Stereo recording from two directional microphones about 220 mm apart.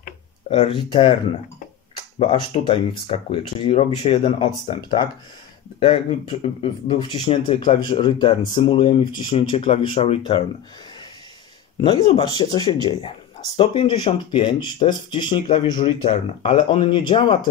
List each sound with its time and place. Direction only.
0.5 s speech: 25° left (ahead or behind)
2.1 s speech: 25° left (ahead or behind)
11.8 s speech: 25° left (ahead or behind)